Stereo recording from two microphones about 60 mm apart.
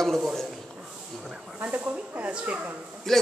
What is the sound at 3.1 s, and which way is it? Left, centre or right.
Speech, centre.